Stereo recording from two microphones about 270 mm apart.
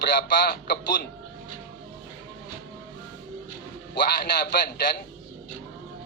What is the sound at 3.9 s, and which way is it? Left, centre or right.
Speech, left.